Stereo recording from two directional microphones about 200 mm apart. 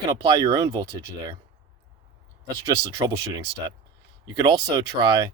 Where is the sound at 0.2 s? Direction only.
20° right (ahead or behind).